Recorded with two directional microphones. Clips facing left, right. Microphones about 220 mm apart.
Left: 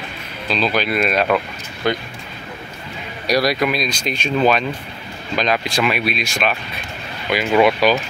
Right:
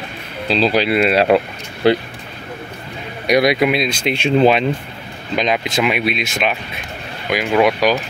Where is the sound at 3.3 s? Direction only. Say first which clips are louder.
Right 4 dB; 20° right (ahead or behind).